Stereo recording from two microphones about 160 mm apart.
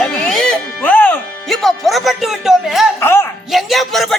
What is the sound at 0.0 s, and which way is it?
Music, 5° left (ahead or behind).